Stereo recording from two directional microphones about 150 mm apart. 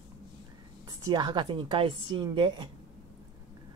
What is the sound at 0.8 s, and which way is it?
A woman's voice, 25° right (ahead or behind).